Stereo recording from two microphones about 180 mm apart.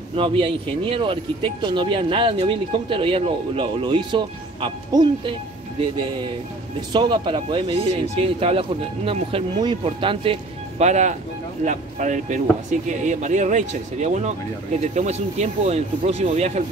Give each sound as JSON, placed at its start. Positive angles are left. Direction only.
{"t": 0.1, "sound": "speech", "side_deg": -30}